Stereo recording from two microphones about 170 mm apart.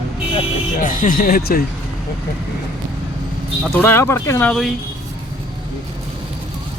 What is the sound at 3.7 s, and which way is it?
Speech, 15° left (ahead or behind).